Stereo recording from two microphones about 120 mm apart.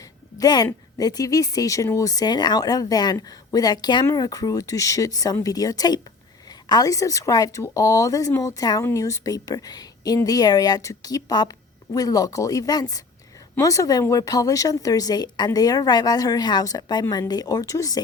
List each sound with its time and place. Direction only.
0.0 s a woman's voice: 30° left (ahead or behind)